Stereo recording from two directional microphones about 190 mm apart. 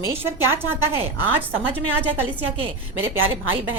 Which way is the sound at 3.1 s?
90° right.